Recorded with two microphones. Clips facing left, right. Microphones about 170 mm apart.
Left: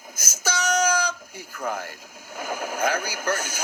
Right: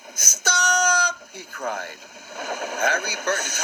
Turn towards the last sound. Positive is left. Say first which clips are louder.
# right 1 dB
turn(degrees=10)  # may be behind; listen again after turning